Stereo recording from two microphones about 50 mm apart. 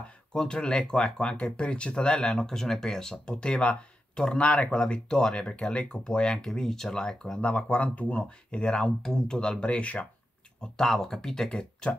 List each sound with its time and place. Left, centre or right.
0.4 s speech: centre
8.6 s speech: centre
10.6 s speech: centre